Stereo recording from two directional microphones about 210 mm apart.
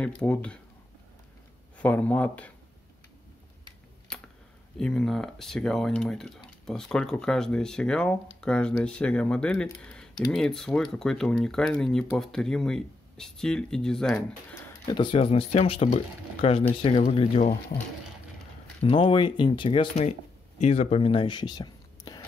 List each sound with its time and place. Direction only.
0.2 s speech: 5° left (ahead or behind)
1.8 s speech: 5° left (ahead or behind)
4.7 s speech: 5° left (ahead or behind)
14.5 s speech: 20° left (ahead or behind)
18.8 s speech: 25° left (ahead or behind)